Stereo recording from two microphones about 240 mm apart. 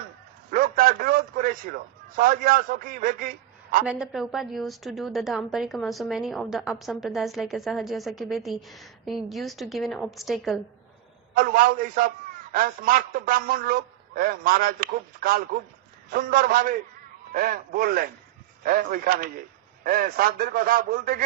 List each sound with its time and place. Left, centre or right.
0.5 s a sound: right
2.1 s a man's voice: right
3.8 s a woman's voice: centre
11.3 s a man's voice: right